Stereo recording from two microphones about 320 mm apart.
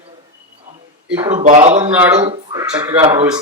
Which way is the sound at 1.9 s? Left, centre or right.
Centre.